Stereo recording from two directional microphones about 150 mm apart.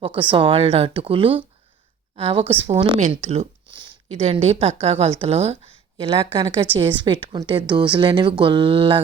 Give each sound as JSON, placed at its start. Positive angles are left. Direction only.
{"t": 0.0, "sound": "a woman's voice", "side_deg": -35}
{"t": 3.7, "sound": "a sound", "side_deg": -30}
{"t": 4.2, "sound": "a woman's voice", "side_deg": -45}